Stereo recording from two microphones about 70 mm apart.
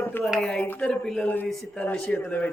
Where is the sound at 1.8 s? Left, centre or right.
Centre.